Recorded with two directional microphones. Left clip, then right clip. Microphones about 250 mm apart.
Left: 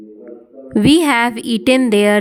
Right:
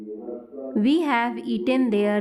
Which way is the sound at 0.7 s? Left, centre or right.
Left.